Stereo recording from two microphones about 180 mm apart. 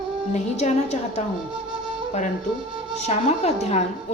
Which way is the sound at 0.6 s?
40° left (ahead or behind).